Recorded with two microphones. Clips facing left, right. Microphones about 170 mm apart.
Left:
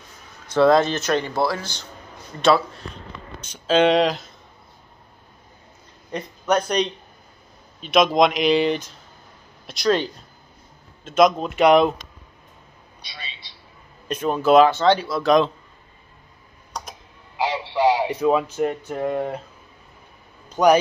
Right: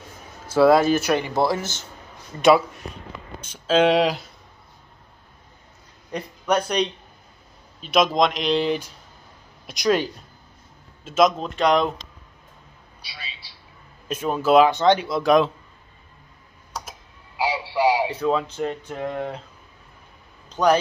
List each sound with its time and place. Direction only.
0.5 s speech: 5° right (ahead or behind)
3.5 s speech: 5° right (ahead or behind)
6.1 s speech: 5° right (ahead or behind)
9.7 s speech: 10° right (ahead or behind); by 11.9 s 10° left (ahead or behind)
13.0 s a sound: 5° right (ahead or behind)
14.0 s speech: 5° right (ahead or behind)
14.7 s speech: 15° right (ahead or behind)
15.2 s speech: 5° right (ahead or behind)
16.7 s tick-tock: 5° right (ahead or behind)
17.4 s radio: 10° right (ahead or behind)
18.0 s speech: 15° left (ahead or behind)
20.4 s a sound: 10° left (ahead or behind)